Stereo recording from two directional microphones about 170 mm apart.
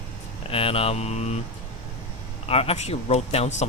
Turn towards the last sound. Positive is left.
turn(degrees=40)  # may be behind; listen again after turning